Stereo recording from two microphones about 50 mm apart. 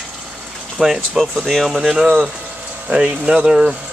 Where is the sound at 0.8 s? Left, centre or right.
Centre.